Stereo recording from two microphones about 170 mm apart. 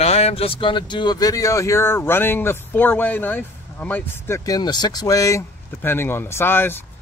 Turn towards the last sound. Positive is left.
turn(degrees=15)  # may be behind; listen again after turning